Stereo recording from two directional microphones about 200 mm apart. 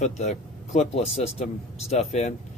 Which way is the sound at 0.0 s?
35° left (ahead or behind).